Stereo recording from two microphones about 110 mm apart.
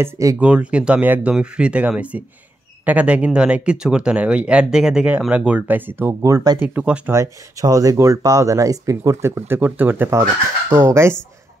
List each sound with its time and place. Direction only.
0.0 s speech: 30° right (ahead or behind)
0.4 s speech: 10° right (ahead or behind); by 6.6 s 35° right (ahead or behind)
6.6 s speech: 10° right (ahead or behind)
7.6 s speech: 30° right (ahead or behind)